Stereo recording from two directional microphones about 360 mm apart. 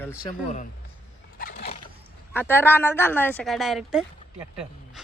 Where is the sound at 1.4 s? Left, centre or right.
Left.